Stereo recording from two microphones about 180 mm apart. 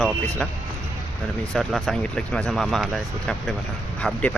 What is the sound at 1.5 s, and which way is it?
Speech, centre (ahead or behind).